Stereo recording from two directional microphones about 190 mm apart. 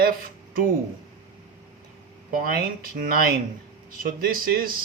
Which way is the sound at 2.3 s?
50° right (ahead or behind).